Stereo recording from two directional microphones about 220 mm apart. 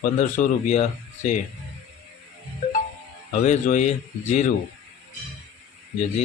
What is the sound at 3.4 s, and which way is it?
A man's voice, 35° left (ahead or behind).